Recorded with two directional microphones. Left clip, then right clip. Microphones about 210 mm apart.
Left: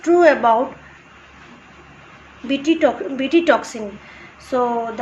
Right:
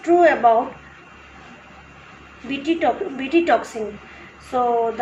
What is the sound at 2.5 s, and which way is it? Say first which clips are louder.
A woman's voice: left 3 dB; 55° left (ahead or behind).